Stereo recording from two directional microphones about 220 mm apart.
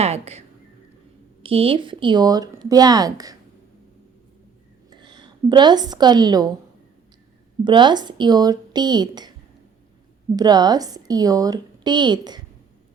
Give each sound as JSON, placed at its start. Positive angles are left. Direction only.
{"t": 0.0, "sound": "speech", "side_deg": -30}
{"t": 4.9, "sound": "a woman's voice", "side_deg": -20}
{"t": 7.6, "sound": "speech", "side_deg": -20}
{"t": 10.3, "sound": "a woman's voice", "side_deg": -20}